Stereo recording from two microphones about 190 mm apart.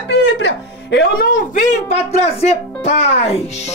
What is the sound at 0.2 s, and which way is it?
A woman's voice, 65° left (ahead or behind).